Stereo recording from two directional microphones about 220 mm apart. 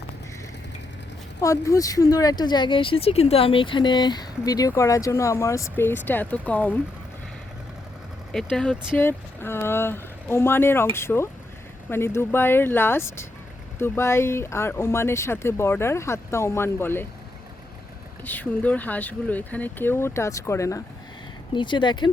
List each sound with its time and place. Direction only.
1.4 s speech: 15° left (ahead or behind)
8.3 s speech: centre (ahead or behind)
18.3 s speech: 5° left (ahead or behind)